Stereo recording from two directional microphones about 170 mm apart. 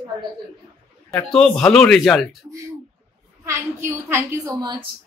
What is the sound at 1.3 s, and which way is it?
Speech, 5° left (ahead or behind).